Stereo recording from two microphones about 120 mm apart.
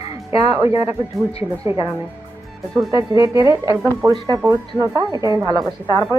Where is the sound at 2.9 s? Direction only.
25° right (ahead or behind).